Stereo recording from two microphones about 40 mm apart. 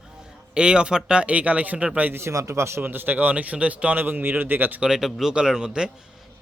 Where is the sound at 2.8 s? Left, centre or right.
Right.